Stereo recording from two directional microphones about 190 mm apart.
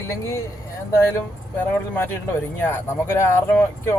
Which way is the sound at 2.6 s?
15° left (ahead or behind).